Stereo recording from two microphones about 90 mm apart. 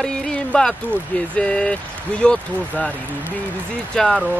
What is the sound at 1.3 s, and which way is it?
Speech, 10° left (ahead or behind).